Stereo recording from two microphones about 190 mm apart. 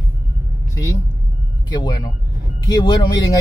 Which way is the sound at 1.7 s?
25° left (ahead or behind).